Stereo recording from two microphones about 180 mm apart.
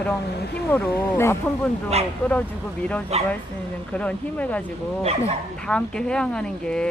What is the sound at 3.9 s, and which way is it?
Speech, 5° left (ahead or behind).